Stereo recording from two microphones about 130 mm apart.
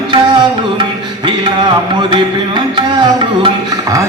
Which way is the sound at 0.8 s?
35° right (ahead or behind).